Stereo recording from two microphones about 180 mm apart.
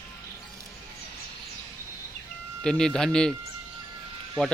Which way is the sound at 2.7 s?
5° left (ahead or behind).